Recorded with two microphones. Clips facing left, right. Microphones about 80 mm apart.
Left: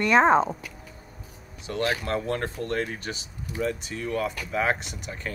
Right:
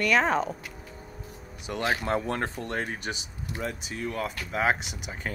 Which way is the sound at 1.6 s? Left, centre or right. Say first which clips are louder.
Left 1 dB; right.